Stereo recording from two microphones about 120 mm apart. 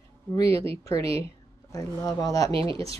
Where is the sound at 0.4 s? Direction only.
25° left (ahead or behind).